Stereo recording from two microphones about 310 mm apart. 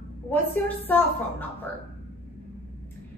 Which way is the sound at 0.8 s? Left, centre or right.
Centre.